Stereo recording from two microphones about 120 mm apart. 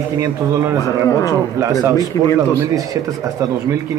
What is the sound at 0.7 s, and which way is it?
Speech, 30° left (ahead or behind).